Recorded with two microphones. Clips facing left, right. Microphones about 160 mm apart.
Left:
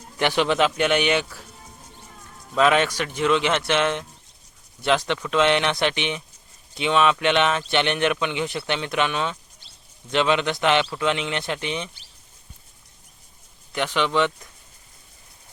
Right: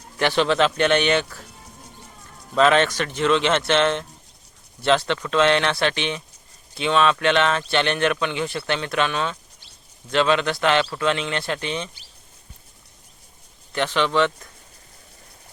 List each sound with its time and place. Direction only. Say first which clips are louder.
0.2 s speech: right 1 dB; 15° left (ahead or behind)
2.6 s speech: right 2 dB; 10° left (ahead or behind)
13.7 s speech: right 2 dB; 10° left (ahead or behind)